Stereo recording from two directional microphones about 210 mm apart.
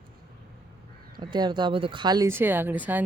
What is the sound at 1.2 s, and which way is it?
Speech, 20° right (ahead or behind).